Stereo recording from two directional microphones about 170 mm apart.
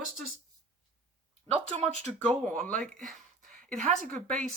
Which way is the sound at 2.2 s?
5° left (ahead or behind).